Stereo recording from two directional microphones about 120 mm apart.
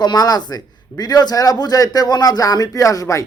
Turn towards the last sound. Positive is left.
turn(degrees=25)  # may be behind; listen again after turning